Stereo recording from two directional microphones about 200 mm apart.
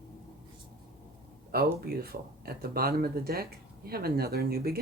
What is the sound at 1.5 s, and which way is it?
Speech, 50° right (ahead or behind).